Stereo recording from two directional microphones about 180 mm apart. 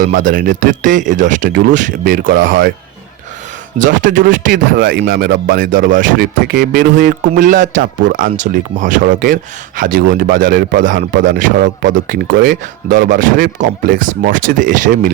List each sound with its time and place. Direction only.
0.0 s a man's voice: 50° right (ahead or behind)
3.8 s a man's voice: 45° right (ahead or behind)